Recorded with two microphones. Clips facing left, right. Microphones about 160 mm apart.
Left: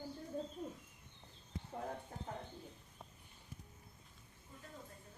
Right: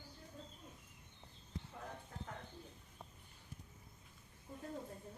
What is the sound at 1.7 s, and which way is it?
Clip-clop, 40° left (ahead or behind).